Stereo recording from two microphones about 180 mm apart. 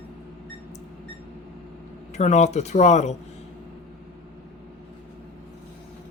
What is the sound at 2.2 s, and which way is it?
Speech, 40° left (ahead or behind).